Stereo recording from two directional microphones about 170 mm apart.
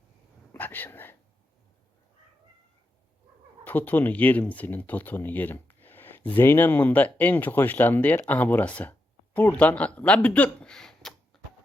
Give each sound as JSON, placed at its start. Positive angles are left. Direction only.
{"t": 0.5, "sound": "speech", "side_deg": 10}
{"t": 3.6, "sound": "speech", "side_deg": 10}